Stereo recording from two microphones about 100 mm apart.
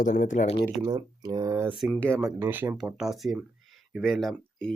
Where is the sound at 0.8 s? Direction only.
40° right (ahead or behind).